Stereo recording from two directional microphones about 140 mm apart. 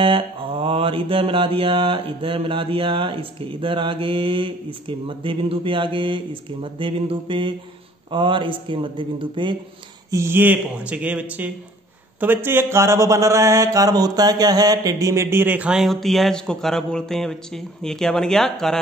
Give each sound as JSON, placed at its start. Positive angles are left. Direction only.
{"t": 0.0, "sound": "mantra", "side_deg": -40}
{"t": 10.1, "sound": "speech", "side_deg": -15}